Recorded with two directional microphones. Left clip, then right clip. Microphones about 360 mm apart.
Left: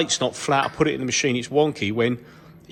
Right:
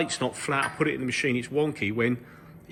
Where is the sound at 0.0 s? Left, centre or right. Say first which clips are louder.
Left 6 dB; centre.